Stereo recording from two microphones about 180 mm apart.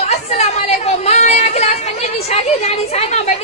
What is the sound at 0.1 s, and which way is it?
Chatter, 40° left (ahead or behind).